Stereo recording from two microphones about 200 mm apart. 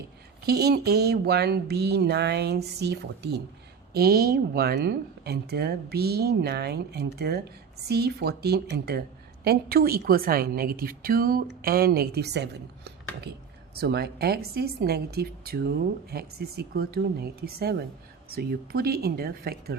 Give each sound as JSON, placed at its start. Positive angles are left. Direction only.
{"t": 0.4, "sound": "speech", "side_deg": -55}